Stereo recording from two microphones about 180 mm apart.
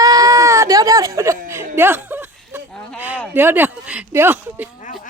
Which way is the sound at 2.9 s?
10° right (ahead or behind).